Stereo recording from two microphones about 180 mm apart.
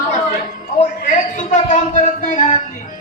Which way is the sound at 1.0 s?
45° left (ahead or behind).